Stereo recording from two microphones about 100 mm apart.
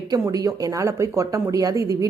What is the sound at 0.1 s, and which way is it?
Speech, 35° right (ahead or behind).